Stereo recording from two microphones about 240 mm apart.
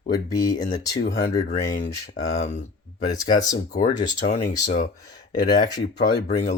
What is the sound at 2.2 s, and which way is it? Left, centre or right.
Speech, left.